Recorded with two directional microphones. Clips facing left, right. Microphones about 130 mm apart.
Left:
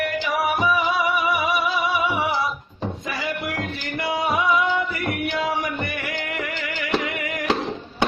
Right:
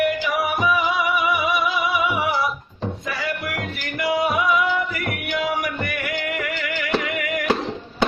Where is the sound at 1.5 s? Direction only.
35° left (ahead or behind).